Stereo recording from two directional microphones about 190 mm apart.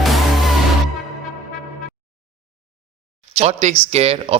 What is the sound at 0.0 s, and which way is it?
Music, centre (ahead or behind).